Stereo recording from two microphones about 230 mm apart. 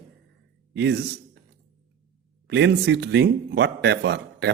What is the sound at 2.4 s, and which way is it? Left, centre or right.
A man's voice, right.